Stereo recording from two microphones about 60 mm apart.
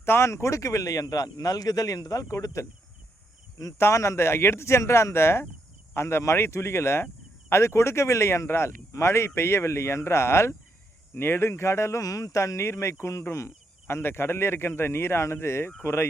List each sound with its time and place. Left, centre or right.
0.0 s speech: left
3.8 s speech: left
12.0 s speech: left